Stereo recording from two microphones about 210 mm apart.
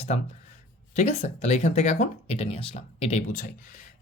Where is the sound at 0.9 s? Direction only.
35° left (ahead or behind).